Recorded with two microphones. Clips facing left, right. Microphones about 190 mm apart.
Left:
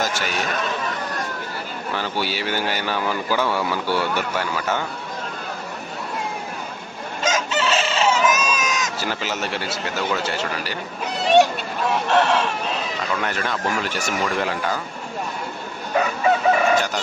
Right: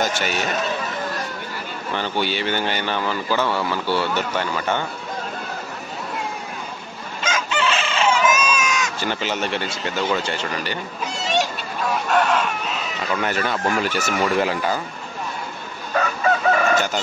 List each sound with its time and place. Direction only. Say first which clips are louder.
0.0 s speech: right 2 dB; centre (ahead or behind)
2.0 s speech: right 2 dB; 5° left (ahead or behind)
7.2 s chicken: left 1 dB; 40° left (ahead or behind)
9.0 s speech: right 2 dB; 5° left (ahead or behind)
11.1 s a sound: left 8 dB; 60° left (ahead or behind)
12.1 s chicken: left 1 dB; 25° left (ahead or behind)
13.2 s speech: right 2 dB; 5° right (ahead or behind)
15.9 s chicken: left 1 dB; 15° left (ahead or behind)